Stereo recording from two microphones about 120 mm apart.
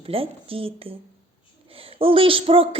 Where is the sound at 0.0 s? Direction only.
50° right (ahead or behind).